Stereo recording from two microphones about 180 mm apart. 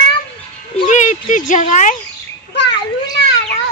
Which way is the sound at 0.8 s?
40° left (ahead or behind).